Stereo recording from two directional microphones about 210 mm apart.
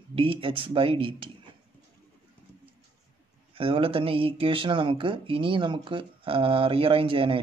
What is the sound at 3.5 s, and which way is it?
Speech, 25° right (ahead or behind).